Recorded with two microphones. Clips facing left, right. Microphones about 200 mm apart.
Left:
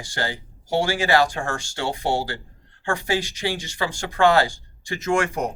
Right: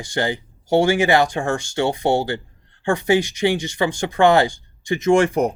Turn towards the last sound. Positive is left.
turn(degrees=-20)  # may be behind; listen again after turning